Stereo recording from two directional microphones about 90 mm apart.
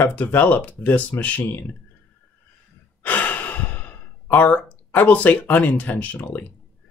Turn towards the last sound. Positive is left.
turn(degrees=20)  # may be behind; listen again after turning